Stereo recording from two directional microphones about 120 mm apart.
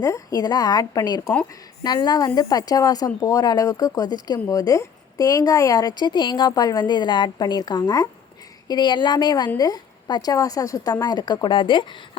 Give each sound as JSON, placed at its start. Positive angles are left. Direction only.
{"t": 0.0, "sound": "a woman's voice", "side_deg": 30}